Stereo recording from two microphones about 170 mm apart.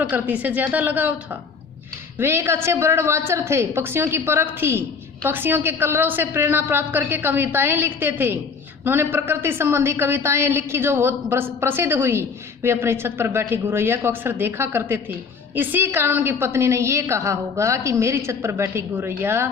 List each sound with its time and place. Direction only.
0.0 s a woman's voice: 10° right (ahead or behind)